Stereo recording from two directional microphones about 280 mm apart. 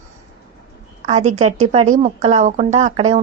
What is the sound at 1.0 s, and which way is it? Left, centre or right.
A woman's voice, right.